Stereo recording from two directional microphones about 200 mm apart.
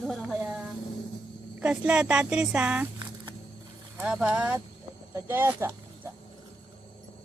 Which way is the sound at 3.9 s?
5° right (ahead or behind).